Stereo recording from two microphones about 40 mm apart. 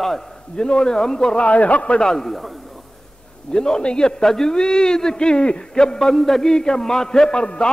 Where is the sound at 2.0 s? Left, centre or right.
Centre.